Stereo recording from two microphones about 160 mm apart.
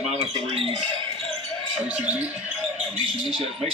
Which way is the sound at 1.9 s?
10° right (ahead or behind).